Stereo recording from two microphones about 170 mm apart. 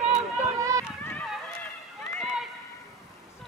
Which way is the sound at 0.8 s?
15° left (ahead or behind).